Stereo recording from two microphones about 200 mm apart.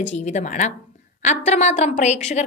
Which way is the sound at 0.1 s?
35° left (ahead or behind).